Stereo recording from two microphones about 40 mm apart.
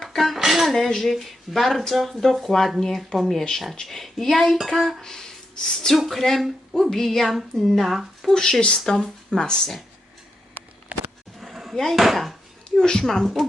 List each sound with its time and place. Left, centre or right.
0.0 s dishes: centre
0.3 s dishes: centre
0.7 s speech: centre
5.0 s speech: centre
6.0 s speech: centre
8.3 s speech: centre
10.9 s a sound: right
11.3 s a sound: centre
11.9 s speech: centre
12.7 s speech: centre